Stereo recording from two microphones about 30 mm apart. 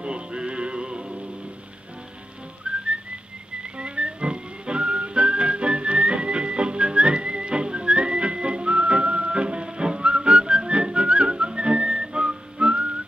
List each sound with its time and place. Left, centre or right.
0.0 s music: right
2.6 s whistling: right
3.7 s music: right
9.7 s whistling: right